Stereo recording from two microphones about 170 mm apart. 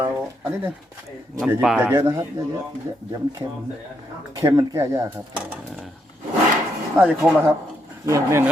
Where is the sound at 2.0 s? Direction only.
25° right (ahead or behind).